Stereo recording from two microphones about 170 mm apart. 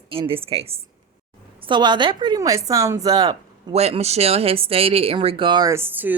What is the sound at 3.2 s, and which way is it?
A woman's voice, 35° right (ahead or behind).